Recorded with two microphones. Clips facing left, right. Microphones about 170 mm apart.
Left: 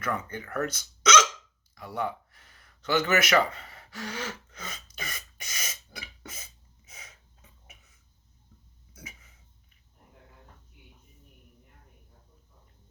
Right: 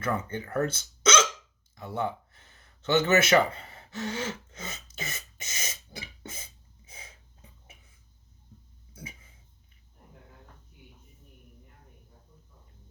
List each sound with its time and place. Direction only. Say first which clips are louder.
0.0 s speech: right 2 dB; 25° right (ahead or behind)
1.7 s gasp: right 1 dB; 25° right (ahead or behind)
3.5 s throat clearing: right 3 dB; 25° right (ahead or behind)
8.9 s throat clearing: right 3 dB; 30° right (ahead or behind)